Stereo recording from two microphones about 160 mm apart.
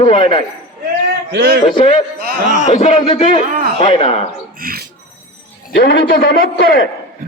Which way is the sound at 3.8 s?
35° left (ahead or behind).